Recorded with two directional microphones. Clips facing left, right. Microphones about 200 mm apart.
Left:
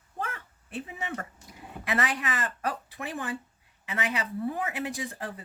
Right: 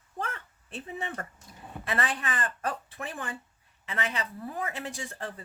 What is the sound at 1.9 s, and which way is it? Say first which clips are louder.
Speech: left 2 dB; 15° left (ahead or behind).